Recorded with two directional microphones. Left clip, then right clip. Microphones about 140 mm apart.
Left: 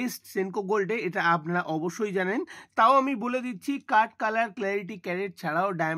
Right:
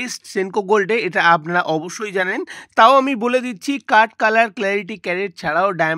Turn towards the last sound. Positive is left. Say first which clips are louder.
# right 10 dB
turn(degrees=-45)  # may be behind; listen again after turning